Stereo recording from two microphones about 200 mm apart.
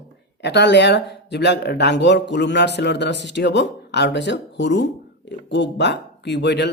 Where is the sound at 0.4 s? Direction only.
60° left (ahead or behind).